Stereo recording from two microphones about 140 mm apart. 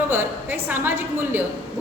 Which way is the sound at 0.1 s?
15° right (ahead or behind).